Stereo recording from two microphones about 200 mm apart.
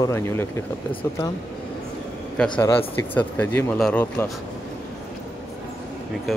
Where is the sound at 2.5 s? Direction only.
15° left (ahead or behind).